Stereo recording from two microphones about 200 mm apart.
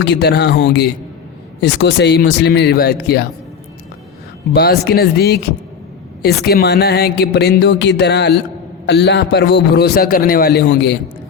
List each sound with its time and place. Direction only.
0.0 s a man's voice: 60° left (ahead or behind)
4.5 s a man's voice: 55° left (ahead or behind)